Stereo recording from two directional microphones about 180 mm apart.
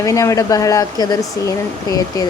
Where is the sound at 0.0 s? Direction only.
15° left (ahead or behind).